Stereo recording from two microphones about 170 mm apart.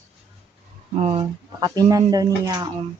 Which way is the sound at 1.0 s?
30° right (ahead or behind).